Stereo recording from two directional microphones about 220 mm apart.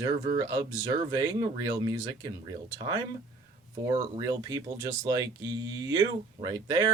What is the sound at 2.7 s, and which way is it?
Speech, 20° right (ahead or behind).